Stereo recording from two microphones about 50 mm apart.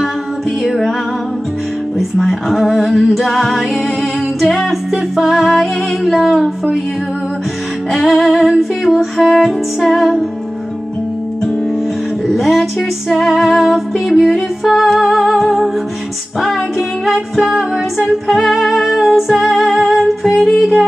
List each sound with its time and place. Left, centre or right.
2.0 s music: centre
7.9 s music: centre
12.3 s music: centre
17.0 s music: centre
17.5 s music: centre
18.1 s music: centre
20.4 s music: centre